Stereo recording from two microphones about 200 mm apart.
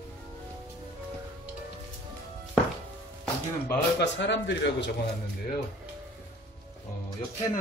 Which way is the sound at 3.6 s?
60° left (ahead or behind).